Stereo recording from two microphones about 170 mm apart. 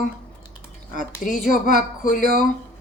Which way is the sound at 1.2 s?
50° left (ahead or behind).